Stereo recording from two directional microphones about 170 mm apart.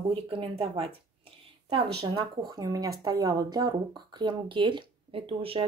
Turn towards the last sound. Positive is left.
turn(degrees=-30)  # may be behind; listen again after turning